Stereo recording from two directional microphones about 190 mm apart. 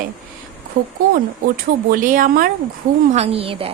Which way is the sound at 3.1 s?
30° right (ahead or behind).